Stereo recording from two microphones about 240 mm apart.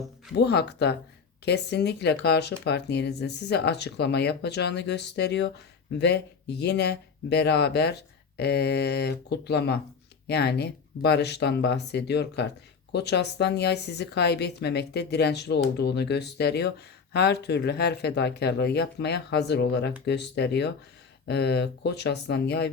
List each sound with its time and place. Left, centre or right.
0.3 s speech: left